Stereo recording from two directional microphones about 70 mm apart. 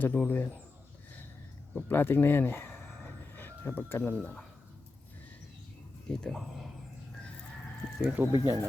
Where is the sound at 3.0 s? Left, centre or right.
Left.